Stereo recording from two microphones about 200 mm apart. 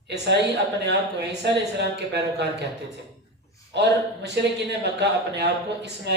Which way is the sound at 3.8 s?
60° right (ahead or behind).